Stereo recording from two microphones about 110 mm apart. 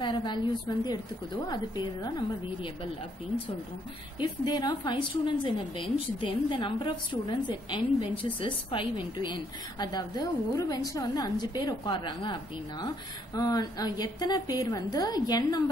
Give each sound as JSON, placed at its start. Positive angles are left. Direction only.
{"t": 0.0, "sound": "a woman's voice", "side_deg": 45}
{"t": 4.2, "sound": "a woman's voice", "side_deg": 40}